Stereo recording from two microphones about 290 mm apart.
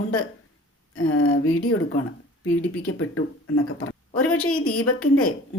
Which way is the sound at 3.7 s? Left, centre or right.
Left.